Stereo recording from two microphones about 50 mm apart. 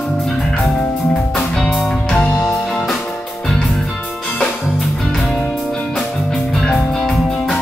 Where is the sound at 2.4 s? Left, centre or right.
Centre.